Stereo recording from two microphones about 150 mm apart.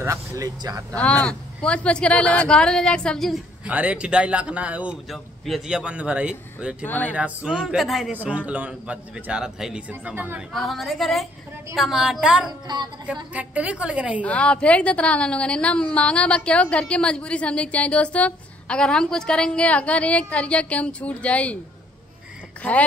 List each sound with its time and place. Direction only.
0.0 s speech: 20° right (ahead or behind)
0.9 s a woman's voice: 10° left (ahead or behind)
3.6 s a man's voice: 10° right (ahead or behind)
6.8 s a woman's voice: 10° left (ahead or behind)
7.2 s a man's voice: 10° right (ahead or behind)
10.5 s a man's voice: centre (ahead or behind)
14.2 s a woman's voice: 10° left (ahead or behind)
22.6 s a woman's voice: 10° left (ahead or behind)